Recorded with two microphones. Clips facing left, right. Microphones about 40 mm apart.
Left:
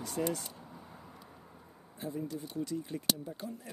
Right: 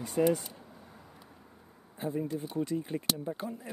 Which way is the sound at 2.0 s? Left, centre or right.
Right.